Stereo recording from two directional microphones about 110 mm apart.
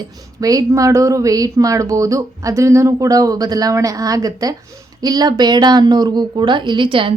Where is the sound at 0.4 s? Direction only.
30° right (ahead or behind).